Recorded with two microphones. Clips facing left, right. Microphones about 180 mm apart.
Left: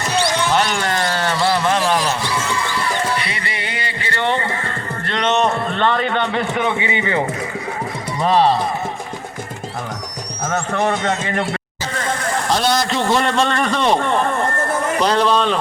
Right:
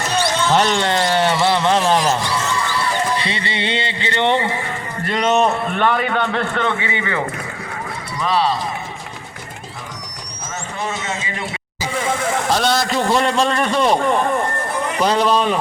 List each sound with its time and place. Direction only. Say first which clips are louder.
0.5 s a sound: right 2 dB; 30° right (ahead or behind)
3.2 s music: right 3 dB; 30° right (ahead or behind)
4.7 s a sound: right 1 dB; 5° right (ahead or behind)
6.7 s speech: left 2 dB; 20° left (ahead or behind)
8.2 s speech: left 4 dB; 40° left (ahead or behind)
10.5 s a man's voice: left 7 dB; 60° left (ahead or behind)
11.9 s a man's voice: right 2 dB; 5° right (ahead or behind)